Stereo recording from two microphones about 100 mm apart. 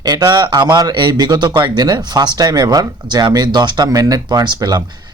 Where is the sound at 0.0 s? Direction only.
40° right (ahead or behind).